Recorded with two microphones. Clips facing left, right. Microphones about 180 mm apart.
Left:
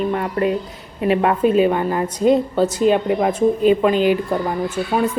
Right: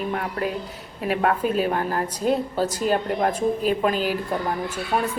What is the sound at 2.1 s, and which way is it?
Speech, 10° right (ahead or behind).